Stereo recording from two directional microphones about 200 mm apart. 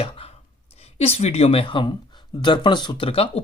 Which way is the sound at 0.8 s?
30° left (ahead or behind).